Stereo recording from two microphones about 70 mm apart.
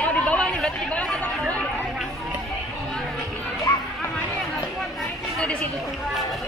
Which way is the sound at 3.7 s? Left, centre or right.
Left.